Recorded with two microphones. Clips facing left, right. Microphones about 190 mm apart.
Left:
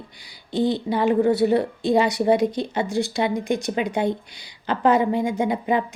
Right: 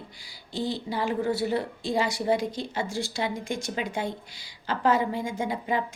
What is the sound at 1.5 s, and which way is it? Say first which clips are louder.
Speech: left 8 dB; 65° left (ahead or behind).